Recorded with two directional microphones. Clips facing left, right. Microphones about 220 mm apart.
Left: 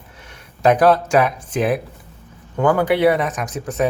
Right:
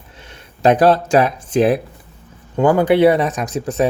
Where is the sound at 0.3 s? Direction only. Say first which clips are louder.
Right 2 dB; 30° right (ahead or behind).